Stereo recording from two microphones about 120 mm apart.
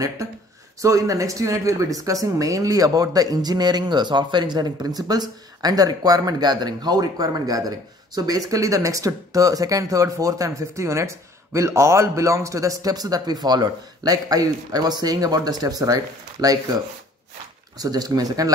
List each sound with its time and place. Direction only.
0.7 s speech: 25° right (ahead or behind)